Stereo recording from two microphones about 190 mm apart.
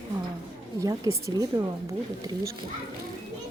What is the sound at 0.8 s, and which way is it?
Speech, 20° right (ahead or behind).